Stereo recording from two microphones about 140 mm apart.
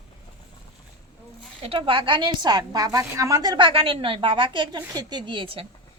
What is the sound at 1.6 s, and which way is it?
A woman's voice, 40° right (ahead or behind).